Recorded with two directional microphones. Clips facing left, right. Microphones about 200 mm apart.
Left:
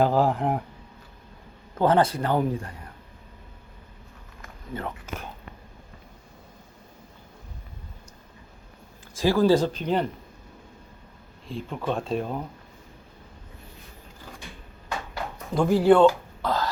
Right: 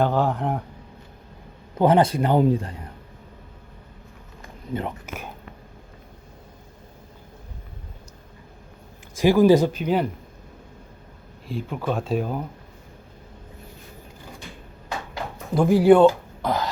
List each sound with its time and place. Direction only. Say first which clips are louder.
0.0 s speech: even; 5° left (ahead or behind)
1.8 s speech: right 3 dB; 15° right (ahead or behind)
4.7 s speech: right 5 dB; 20° right (ahead or behind)
9.1 s speech: right 4 dB; 15° right (ahead or behind)
11.4 s speech: right 2 dB; 5° right (ahead or behind)
15.5 s speech: right 3 dB; 10° right (ahead or behind)